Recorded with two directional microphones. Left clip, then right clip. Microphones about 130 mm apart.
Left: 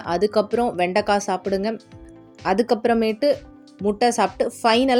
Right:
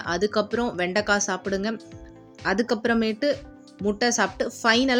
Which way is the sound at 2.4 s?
20° left (ahead or behind).